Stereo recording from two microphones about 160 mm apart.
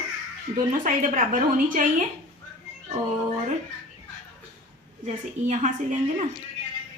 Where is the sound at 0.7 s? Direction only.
55° right (ahead or behind).